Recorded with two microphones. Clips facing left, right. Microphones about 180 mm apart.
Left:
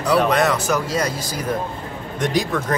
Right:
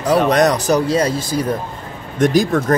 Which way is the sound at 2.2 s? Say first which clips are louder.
Right 7 dB; 45° right (ahead or behind).